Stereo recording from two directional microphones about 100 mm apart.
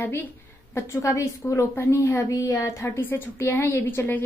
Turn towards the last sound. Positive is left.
turn(degrees=20)  # may be behind; listen again after turning